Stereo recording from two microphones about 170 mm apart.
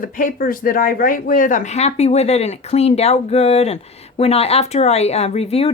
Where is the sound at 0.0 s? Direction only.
55° left (ahead or behind).